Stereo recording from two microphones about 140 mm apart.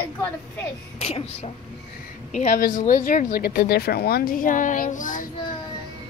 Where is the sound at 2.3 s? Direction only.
65° left (ahead or behind).